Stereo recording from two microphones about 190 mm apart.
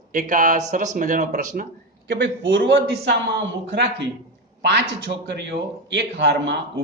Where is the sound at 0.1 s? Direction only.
45° right (ahead or behind).